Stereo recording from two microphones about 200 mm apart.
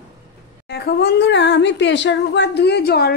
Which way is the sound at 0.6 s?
55° left (ahead or behind).